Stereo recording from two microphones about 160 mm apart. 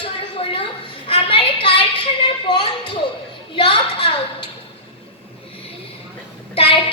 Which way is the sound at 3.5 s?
35° left (ahead or behind).